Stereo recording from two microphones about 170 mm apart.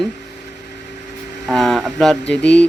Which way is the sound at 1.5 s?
Centre (ahead or behind).